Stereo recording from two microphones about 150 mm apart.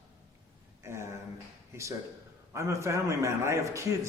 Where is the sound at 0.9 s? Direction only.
15° right (ahead or behind).